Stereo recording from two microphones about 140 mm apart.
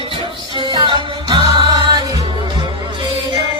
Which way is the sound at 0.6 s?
35° right (ahead or behind).